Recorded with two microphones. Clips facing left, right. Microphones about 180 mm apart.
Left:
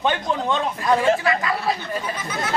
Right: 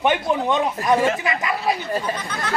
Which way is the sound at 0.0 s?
15° right (ahead or behind).